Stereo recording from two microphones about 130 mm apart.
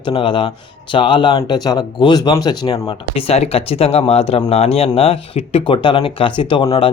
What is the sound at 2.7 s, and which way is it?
Speech, 45° left (ahead or behind).